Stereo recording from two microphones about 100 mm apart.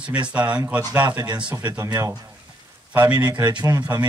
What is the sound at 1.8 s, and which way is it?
Speech, 30° right (ahead or behind).